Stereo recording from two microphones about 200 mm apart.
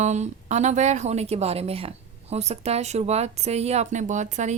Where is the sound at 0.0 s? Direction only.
35° right (ahead or behind).